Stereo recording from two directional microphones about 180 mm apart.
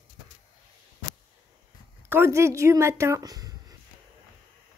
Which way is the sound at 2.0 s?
15° right (ahead or behind).